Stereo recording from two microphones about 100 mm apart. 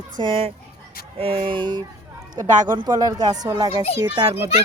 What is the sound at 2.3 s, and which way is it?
Speech, 45° right (ahead or behind).